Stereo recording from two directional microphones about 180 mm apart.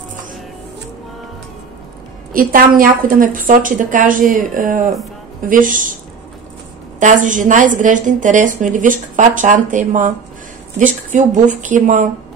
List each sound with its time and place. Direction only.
2.3 s a woman's voice: 50° right (ahead or behind)
7.0 s a woman's voice: 45° right (ahead or behind)